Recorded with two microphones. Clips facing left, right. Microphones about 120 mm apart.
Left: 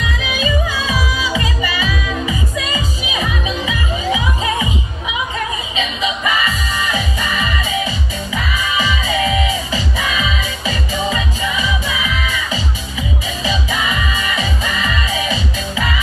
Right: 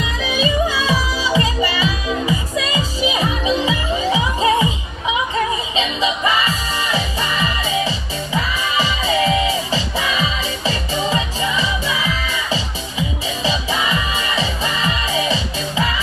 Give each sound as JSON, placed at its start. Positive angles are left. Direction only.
{"t": 0.2, "sound": "music", "side_deg": -35}
{"t": 5.8, "sound": "music", "side_deg": -30}
{"t": 8.7, "sound": "music", "side_deg": -30}